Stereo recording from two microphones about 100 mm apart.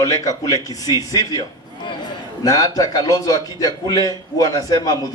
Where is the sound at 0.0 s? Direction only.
35° left (ahead or behind).